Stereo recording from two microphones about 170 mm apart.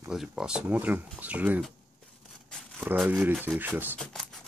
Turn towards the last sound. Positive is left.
turn(degrees=0)  # may be behind; listen again after turning